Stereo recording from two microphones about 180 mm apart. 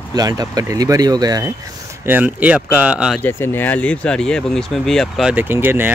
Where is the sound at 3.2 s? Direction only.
10° left (ahead or behind).